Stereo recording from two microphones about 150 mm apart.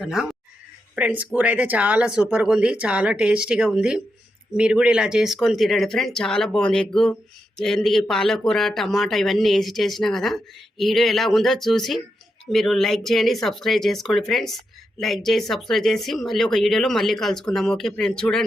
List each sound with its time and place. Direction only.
0.0 s speech: 5° right (ahead or behind)